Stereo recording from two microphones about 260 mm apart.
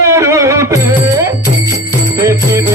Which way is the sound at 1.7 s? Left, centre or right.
Centre.